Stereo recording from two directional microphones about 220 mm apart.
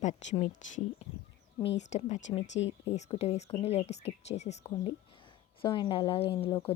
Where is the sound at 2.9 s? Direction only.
30° left (ahead or behind).